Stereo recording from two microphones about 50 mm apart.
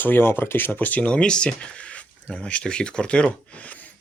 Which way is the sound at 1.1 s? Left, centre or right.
Centre.